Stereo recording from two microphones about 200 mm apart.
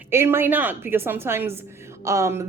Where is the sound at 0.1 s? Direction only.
10° right (ahead or behind).